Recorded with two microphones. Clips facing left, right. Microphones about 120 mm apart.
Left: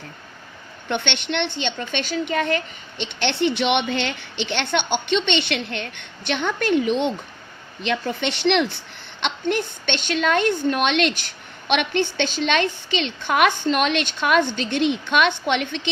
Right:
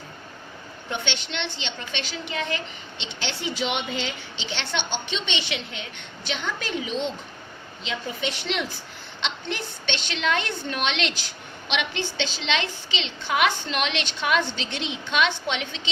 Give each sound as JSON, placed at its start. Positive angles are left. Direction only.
{"t": 0.9, "sound": "a woman's voice", "side_deg": 65}
{"t": 9.2, "sound": "a woman's voice", "side_deg": 50}